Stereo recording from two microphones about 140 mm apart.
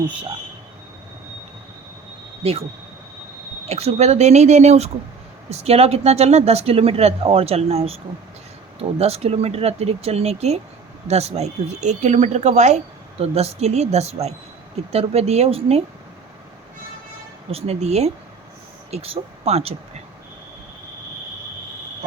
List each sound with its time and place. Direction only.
3.7 s speech: 50° right (ahead or behind)
17.5 s speech: 45° right (ahead or behind)